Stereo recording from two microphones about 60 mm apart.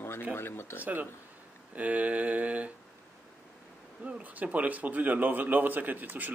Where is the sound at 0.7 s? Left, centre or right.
Right.